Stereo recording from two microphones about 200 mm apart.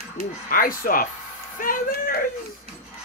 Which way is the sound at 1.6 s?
45° left (ahead or behind).